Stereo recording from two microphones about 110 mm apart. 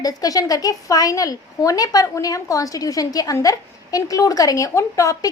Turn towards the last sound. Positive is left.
turn(degrees=30)  # may be behind; listen again after turning